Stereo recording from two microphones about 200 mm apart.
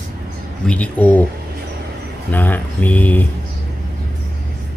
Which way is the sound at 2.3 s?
10° left (ahead or behind).